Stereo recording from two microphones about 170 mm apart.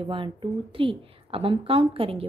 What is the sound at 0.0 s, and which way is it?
A woman's voice, 30° right (ahead or behind).